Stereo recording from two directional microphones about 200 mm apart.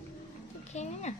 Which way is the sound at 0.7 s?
35° left (ahead or behind).